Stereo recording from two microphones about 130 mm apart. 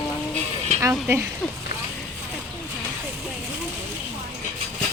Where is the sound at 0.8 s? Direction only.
20° right (ahead or behind).